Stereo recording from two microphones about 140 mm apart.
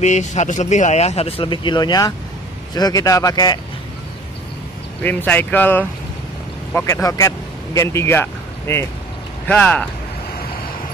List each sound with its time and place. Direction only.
0.0 s a man's voice: 55° left (ahead or behind); by 3.5 s 25° left (ahead or behind)
5.0 s a man's voice: 15° left (ahead or behind)